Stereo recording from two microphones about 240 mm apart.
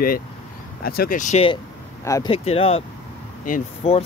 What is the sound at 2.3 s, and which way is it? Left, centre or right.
Speech, left.